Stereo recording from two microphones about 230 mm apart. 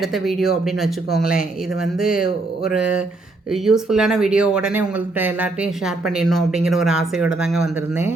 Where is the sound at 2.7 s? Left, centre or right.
Centre.